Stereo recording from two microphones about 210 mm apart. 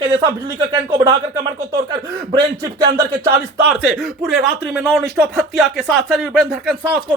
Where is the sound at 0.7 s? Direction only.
25° right (ahead or behind).